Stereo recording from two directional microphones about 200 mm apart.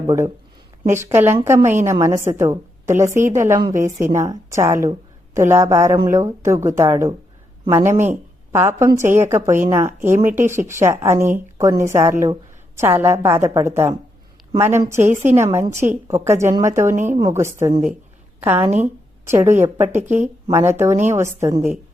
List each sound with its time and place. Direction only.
0.9 s a woman's voice: 15° right (ahead or behind)
14.9 s a woman's voice: 35° right (ahead or behind)
15.4 s a woman's voice: 15° right (ahead or behind)
15.7 s a woman's voice: 35° right (ahead or behind)
16.0 s a woman's voice: 10° right (ahead or behind)
20.1 s a woman's voice: 35° right (ahead or behind)
20.7 s a woman's voice: 10° right (ahead or behind)